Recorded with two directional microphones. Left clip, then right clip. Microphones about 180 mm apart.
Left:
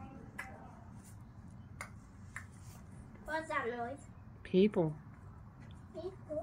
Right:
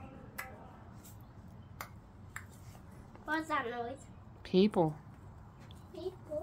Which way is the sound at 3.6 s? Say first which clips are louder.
Even; 30° right (ahead or behind).